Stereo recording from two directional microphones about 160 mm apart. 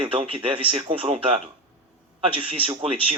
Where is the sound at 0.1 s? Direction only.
35° right (ahead or behind).